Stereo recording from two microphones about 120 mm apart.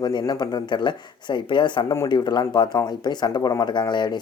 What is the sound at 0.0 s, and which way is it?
Speech, 35° left (ahead or behind).